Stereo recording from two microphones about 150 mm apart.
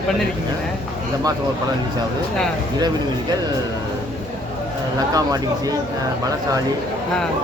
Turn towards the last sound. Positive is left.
turn(degrees=-25)  # may be behind; listen again after turning